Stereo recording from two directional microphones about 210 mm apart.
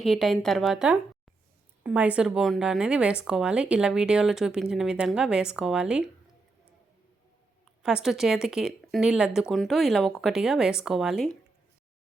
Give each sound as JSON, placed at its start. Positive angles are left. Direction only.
{"t": 0.0, "sound": "speech", "side_deg": 0}
{"t": 7.8, "sound": "speech", "side_deg": -5}